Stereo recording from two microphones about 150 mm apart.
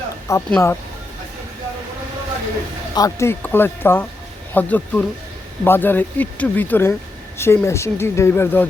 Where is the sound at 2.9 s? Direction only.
20° left (ahead or behind).